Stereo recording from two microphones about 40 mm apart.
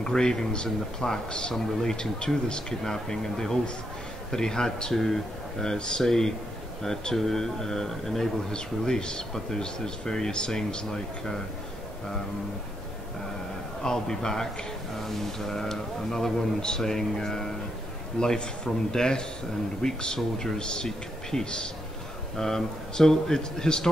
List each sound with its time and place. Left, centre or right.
0.0 s a man's voice: centre
2.8 s a man's voice: centre
13.8 s a man's voice: centre